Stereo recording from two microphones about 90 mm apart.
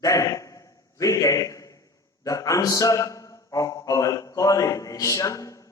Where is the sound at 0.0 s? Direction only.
40° left (ahead or behind).